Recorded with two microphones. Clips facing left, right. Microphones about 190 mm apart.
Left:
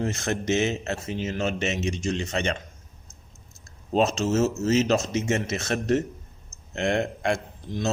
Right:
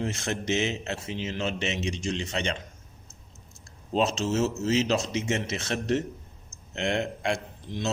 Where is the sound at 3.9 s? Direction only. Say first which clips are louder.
Left 3 dB; 45° left (ahead or behind).